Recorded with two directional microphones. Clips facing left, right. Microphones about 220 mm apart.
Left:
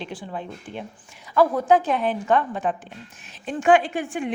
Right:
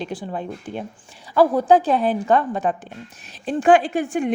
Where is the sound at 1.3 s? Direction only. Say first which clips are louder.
Right 3 dB; 30° right (ahead or behind).